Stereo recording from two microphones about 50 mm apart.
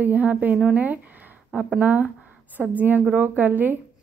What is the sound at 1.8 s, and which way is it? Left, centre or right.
Speech, right.